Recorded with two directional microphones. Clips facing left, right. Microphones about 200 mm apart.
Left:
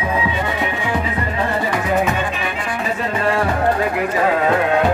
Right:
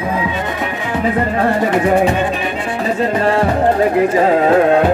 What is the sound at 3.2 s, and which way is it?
Music, 35° right (ahead or behind).